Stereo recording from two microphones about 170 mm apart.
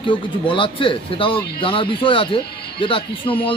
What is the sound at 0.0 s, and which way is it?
A man's voice, 30° left (ahead or behind).